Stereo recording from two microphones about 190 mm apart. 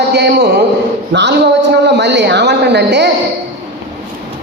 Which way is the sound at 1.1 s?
65° right (ahead or behind).